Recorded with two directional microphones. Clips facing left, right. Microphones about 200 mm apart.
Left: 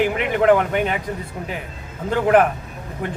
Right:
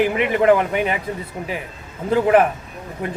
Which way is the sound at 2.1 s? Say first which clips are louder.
Right 1 dB; centre (ahead or behind).